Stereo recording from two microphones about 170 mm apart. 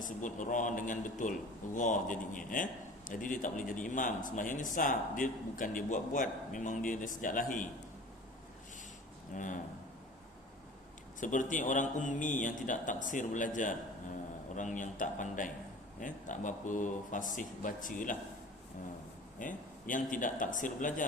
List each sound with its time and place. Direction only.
0.0 s a man's voice: 50° left (ahead or behind)
9.3 s a man's voice: 50° left (ahead or behind)
11.2 s a man's voice: 50° left (ahead or behind)
19.4 s a man's voice: 50° left (ahead or behind)